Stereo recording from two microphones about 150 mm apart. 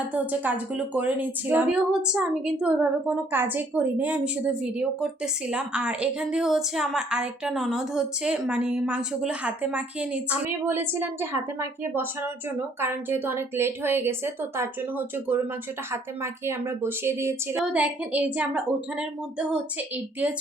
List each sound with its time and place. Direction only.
0.1 s speech: 10° right (ahead or behind)